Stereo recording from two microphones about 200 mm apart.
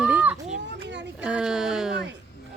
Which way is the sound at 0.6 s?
60° right (ahead or behind).